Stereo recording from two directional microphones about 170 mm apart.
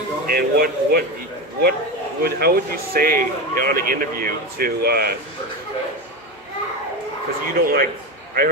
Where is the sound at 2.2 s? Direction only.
65° right (ahead or behind).